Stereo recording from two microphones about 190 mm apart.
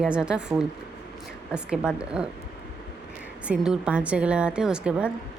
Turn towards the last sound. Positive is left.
turn(degrees=-5)  # may be behind; listen again after turning